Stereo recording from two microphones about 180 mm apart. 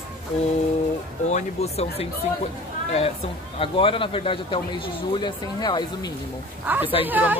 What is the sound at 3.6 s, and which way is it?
Speech, 30° left (ahead or behind).